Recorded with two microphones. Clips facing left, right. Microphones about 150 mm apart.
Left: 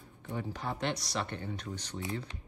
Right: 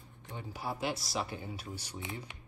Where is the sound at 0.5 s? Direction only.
5° right (ahead or behind).